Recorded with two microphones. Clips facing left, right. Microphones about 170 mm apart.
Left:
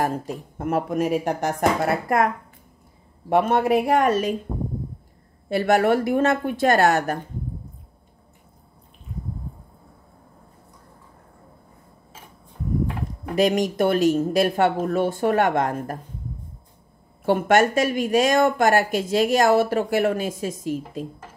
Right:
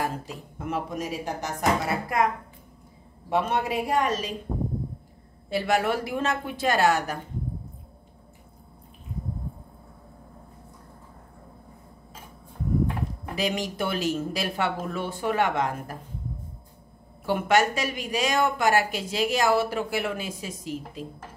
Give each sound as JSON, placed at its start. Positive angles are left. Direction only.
{"t": 0.0, "sound": "speech", "side_deg": 50}
{"t": 5.5, "sound": "speech", "side_deg": 55}
{"t": 13.4, "sound": "speech", "side_deg": 45}
{"t": 17.3, "sound": "speech", "side_deg": 50}